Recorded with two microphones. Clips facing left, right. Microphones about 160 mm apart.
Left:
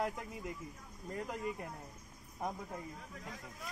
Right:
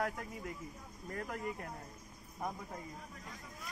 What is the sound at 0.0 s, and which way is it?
A man's voice, 15° left (ahead or behind).